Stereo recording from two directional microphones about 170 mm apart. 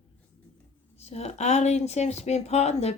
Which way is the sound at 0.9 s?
40° left (ahead or behind).